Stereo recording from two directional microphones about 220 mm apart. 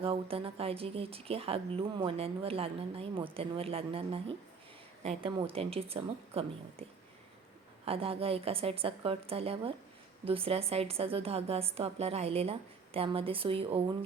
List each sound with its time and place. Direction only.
0.0 s speech: 25° right (ahead or behind)
7.9 s speech: 25° right (ahead or behind)